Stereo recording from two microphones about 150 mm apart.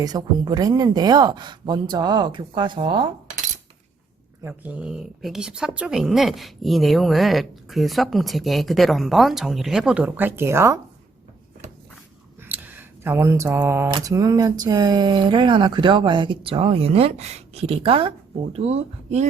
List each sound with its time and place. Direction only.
0.0 s speech: 25° right (ahead or behind)
4.4 s speech: 10° right (ahead or behind)
12.4 s a sound: 10° right (ahead or behind)
13.9 s speech: 25° right (ahead or behind); by 19.3 s 50° right (ahead or behind)